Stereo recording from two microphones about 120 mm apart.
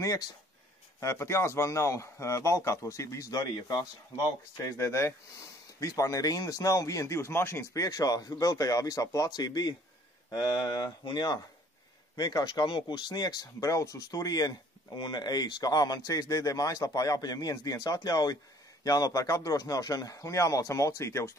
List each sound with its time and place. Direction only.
0.9 s speech: 20° left (ahead or behind)